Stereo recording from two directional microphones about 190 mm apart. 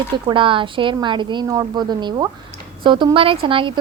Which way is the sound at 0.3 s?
25° right (ahead or behind).